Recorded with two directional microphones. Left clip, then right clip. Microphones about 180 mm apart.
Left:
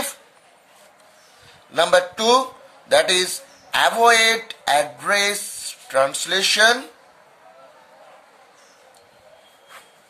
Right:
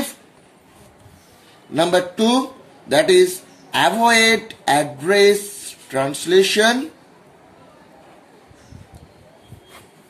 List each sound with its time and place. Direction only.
1.7 s a man's voice: 40° left (ahead or behind)